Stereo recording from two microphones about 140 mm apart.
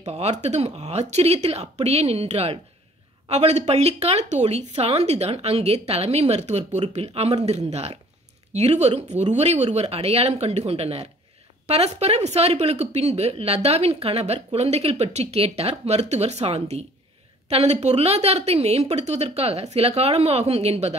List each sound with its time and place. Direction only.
0.0 s speech: 50° right (ahead or behind)